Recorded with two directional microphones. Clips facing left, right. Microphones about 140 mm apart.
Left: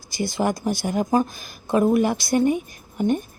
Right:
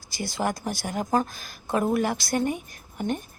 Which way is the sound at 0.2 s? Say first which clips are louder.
Left 5 dB; 20° left (ahead or behind).